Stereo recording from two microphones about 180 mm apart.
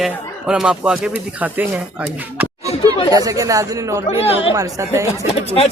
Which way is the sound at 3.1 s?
20° right (ahead or behind).